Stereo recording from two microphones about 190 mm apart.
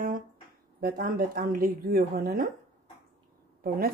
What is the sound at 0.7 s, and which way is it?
Speech, 50° right (ahead or behind).